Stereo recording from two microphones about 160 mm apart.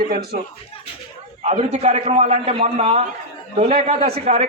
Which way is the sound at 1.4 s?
45° right (ahead or behind).